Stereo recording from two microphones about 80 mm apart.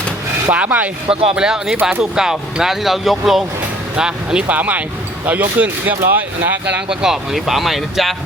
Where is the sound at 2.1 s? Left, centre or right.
Centre.